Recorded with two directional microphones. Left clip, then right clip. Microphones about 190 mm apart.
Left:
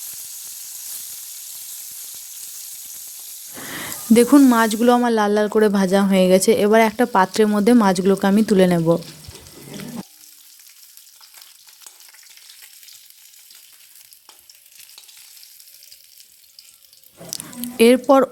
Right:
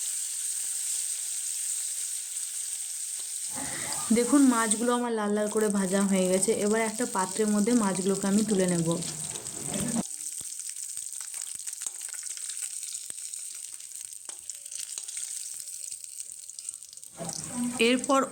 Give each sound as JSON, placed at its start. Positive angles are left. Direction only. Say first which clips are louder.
{"t": 3.8, "sound": "speech", "louder": "left 12 dB", "side_deg": 70}
{"t": 17.3, "sound": "squish", "louder": "left 9 dB", "side_deg": 65}